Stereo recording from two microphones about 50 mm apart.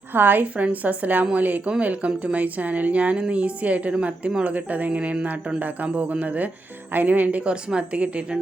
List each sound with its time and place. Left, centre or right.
0.1 s a woman's voice: right
0.5 s a woman's voice: right
7.4 s a woman's voice: centre